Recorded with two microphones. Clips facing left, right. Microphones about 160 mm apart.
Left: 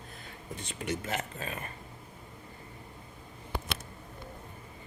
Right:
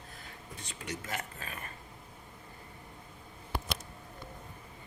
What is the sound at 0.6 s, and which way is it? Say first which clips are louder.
Speech: left 6 dB; 25° left (ahead or behind).